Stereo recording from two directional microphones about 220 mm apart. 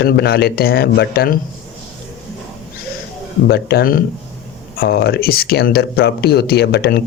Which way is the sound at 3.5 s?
45° left (ahead or behind).